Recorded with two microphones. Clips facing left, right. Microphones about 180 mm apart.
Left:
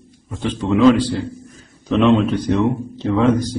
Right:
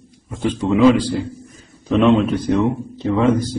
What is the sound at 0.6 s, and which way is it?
A man's voice, centre (ahead or behind).